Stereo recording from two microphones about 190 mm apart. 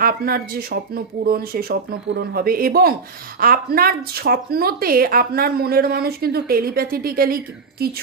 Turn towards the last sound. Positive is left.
turn(degrees=-50)  # may be behind; listen again after turning